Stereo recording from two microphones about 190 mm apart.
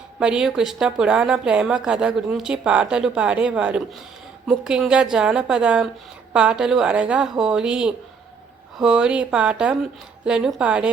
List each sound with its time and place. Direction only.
0.2 s a woman's voice: 5° right (ahead or behind)